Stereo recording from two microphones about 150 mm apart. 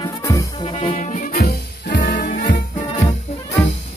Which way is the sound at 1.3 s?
70° left (ahead or behind).